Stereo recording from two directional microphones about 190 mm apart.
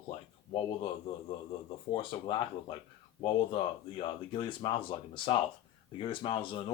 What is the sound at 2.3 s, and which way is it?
Speech, 25° left (ahead or behind).